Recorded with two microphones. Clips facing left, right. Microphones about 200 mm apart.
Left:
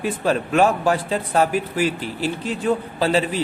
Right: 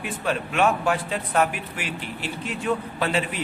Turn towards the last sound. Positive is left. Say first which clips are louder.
# left 6 dB
turn(degrees=30)  # may be behind; listen again after turning